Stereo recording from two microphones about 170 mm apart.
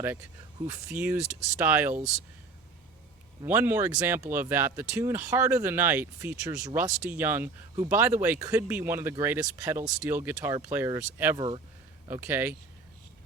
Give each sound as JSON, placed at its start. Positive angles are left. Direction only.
{"t": 0.9, "sound": "speech", "side_deg": -10}
{"t": 1.9, "sound": "speech", "side_deg": -40}
{"t": 3.4, "sound": "speech", "side_deg": -10}
{"t": 11.3, "sound": "speech", "side_deg": -25}
{"t": 12.0, "sound": "speech", "side_deg": -10}